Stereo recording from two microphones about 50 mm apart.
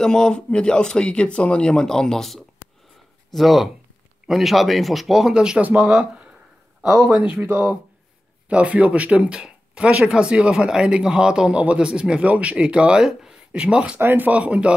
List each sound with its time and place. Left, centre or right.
0.0 s speech: centre
5.3 s speech: centre
5.6 s speech: right
7.5 s speech: right
8.5 s speech: right
12.2 s speech: right
13.9 s speech: right
14.3 s speech: right